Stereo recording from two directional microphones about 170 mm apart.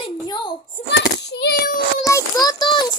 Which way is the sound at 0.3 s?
25° left (ahead or behind).